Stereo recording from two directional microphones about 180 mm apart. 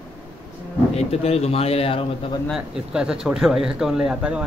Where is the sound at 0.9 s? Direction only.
35° left (ahead or behind).